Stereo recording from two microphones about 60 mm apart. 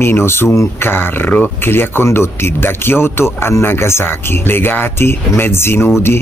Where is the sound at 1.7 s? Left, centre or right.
Left.